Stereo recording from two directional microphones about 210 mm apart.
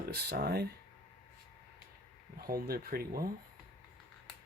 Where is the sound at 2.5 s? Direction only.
45° right (ahead or behind).